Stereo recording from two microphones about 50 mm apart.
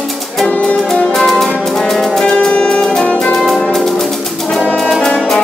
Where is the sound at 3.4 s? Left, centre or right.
Centre.